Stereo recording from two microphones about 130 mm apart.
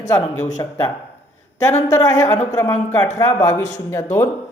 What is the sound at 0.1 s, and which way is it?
Speech, 25° left (ahead or behind).